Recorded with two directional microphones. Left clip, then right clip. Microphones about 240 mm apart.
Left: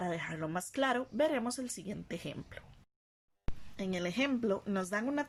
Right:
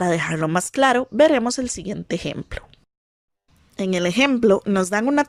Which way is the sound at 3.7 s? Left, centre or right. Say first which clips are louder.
Right 15 dB; right.